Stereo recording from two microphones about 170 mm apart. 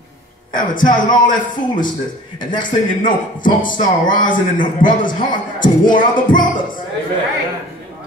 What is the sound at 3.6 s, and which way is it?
A man's voice, 50° left (ahead or behind).